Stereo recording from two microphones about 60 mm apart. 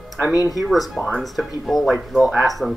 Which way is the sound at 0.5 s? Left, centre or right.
Centre.